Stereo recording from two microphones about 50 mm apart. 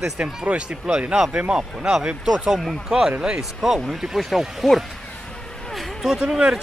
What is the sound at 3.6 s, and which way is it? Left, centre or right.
Speech, centre.